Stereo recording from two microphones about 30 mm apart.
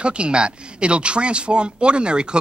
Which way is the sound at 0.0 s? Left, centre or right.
Right.